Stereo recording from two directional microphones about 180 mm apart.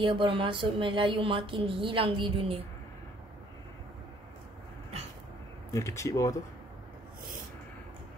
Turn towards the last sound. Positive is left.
turn(degrees=15)  # may be behind; listen again after turning